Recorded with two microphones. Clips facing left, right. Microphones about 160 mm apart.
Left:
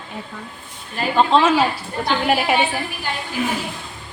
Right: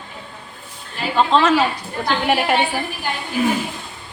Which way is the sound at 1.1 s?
10° left (ahead or behind).